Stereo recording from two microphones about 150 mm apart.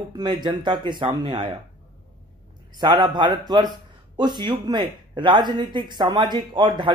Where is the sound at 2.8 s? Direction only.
30° right (ahead or behind).